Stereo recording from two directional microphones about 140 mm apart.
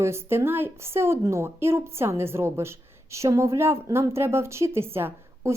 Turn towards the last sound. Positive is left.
turn(degrees=-20)  # may be behind; listen again after turning